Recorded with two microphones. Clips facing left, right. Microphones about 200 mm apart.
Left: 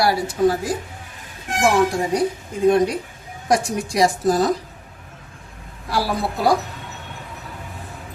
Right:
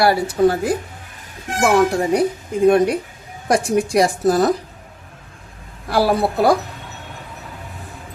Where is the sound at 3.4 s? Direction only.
60° right (ahead or behind).